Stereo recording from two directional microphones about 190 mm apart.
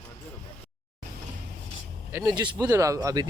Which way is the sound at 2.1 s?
20° right (ahead or behind).